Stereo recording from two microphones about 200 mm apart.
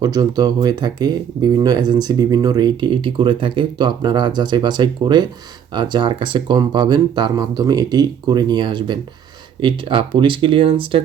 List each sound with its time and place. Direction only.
0.0 s speech: 20° right (ahead or behind)